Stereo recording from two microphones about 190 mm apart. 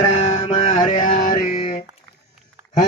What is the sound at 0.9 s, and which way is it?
Music, 45° left (ahead or behind).